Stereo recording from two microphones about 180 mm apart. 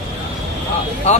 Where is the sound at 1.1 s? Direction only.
40° left (ahead or behind).